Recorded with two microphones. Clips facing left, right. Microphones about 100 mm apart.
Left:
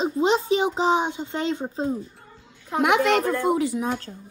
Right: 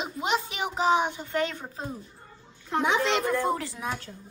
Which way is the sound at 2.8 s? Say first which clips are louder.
Left 5 dB; 80° left.